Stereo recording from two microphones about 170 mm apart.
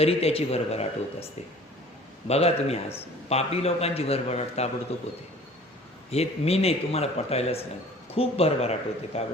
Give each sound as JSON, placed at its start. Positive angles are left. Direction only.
{"t": 0.0, "sound": "a man's voice", "side_deg": 35}
{"t": 6.1, "sound": "a man's voice", "side_deg": 40}